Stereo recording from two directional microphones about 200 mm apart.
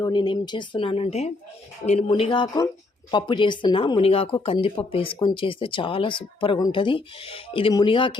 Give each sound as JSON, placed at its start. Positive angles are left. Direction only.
{"t": 0.0, "sound": "speech", "side_deg": 20}